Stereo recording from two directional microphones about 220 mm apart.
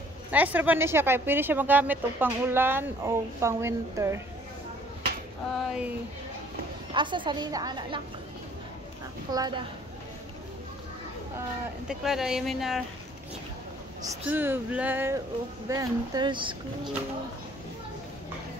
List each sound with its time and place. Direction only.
0.3 s speech: 5° right (ahead or behind)
5.7 s a woman's voice: 5° right (ahead or behind)
6.9 s a woman's voice: 20° right (ahead or behind)
9.3 s speech: 15° right (ahead or behind)
11.9 s a woman's voice: centre (ahead or behind)
14.0 s a woman's voice: 10° right (ahead or behind)